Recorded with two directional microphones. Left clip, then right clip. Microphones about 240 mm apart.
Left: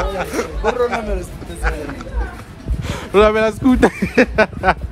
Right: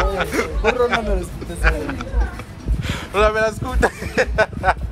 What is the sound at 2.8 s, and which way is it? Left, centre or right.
Speech, left.